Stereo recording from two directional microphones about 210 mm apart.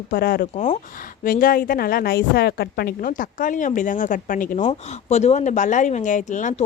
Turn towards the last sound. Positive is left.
turn(degrees=35)  # may be behind; listen again after turning